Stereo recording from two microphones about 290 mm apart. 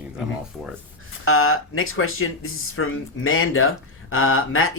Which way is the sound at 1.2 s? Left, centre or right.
Left.